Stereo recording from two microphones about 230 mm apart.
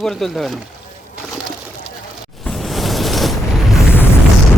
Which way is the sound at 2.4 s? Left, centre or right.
Centre.